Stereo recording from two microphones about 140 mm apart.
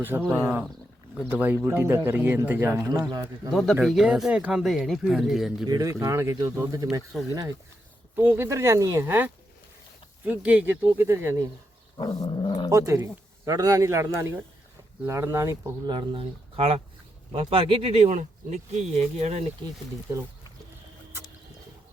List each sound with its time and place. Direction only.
0.3 s a man's voice: 15° right (ahead or behind)
3.5 s speech: centre (ahead or behind)
5.6 s a man's voice: 25° right (ahead or behind)
8.1 s a man's voice: 15° right (ahead or behind)
11.9 s dog: 30° left (ahead or behind)
12.7 s a man's voice: 20° right (ahead or behind)
15.9 s speech: 40° right (ahead or behind)